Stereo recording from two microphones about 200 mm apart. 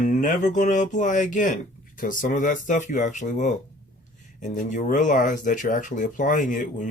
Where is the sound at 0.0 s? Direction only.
40° left (ahead or behind).